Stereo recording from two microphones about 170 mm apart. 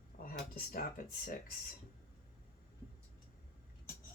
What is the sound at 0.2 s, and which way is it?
Speech, 60° left (ahead or behind).